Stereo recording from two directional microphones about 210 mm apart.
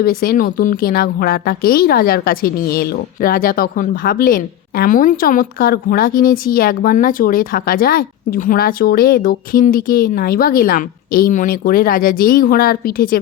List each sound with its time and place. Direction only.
0.0 s a woman's voice: 45° left (ahead or behind)